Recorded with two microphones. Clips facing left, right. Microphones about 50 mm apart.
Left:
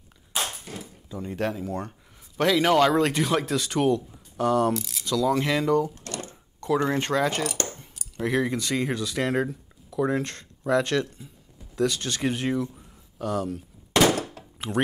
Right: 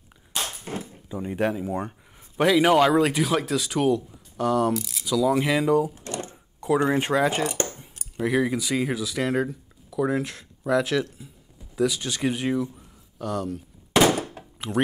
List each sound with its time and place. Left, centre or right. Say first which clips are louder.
0.3 s a sound: left 1 dB; centre
0.7 s speech: right 5 dB; right
7.6 s keys jangling: right 1 dB; centre
8.2 s speech: right 2 dB; centre
13.9 s thunk: right 1 dB; centre